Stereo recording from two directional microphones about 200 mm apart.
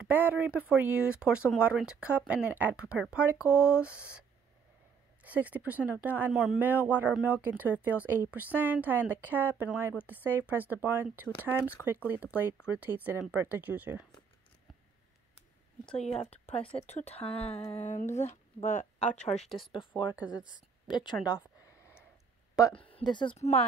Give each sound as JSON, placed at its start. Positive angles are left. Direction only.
{"t": 0.0, "sound": "speech", "side_deg": -10}
{"t": 5.2, "sound": "a woman's voice", "side_deg": -5}
{"t": 16.0, "sound": "speech", "side_deg": 30}
{"t": 22.6, "sound": "speech", "side_deg": 20}